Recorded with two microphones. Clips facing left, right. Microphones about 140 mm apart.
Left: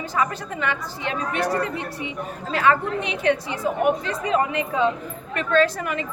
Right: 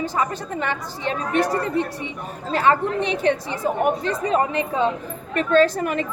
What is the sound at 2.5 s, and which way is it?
A woman's voice, 35° right (ahead or behind).